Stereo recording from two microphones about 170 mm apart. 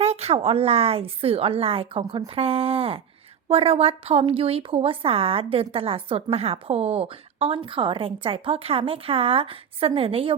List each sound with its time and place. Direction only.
0.0 s a woman's voice: 35° right (ahead or behind)